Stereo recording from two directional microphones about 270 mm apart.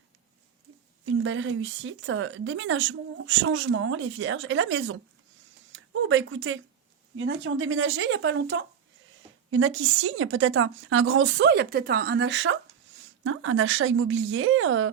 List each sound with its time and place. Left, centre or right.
1.2 s a woman's voice: right
5.7 s a sound: right
7.2 s a woman's voice: right